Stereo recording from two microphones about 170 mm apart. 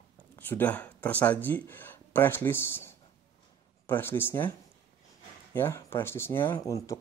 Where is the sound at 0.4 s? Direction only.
10° left (ahead or behind).